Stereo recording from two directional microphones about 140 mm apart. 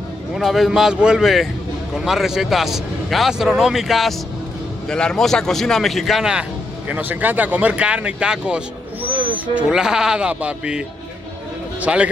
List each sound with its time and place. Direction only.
0.4 s a man's voice: centre (ahead or behind)
9.1 s owl: 35° right (ahead or behind)
9.6 s speech: 5° right (ahead or behind)
11.8 s speech: 10° right (ahead or behind)